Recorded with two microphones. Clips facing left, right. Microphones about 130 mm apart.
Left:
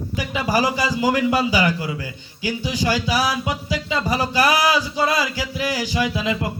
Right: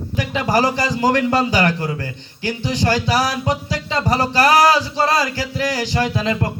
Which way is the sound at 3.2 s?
40° right (ahead or behind).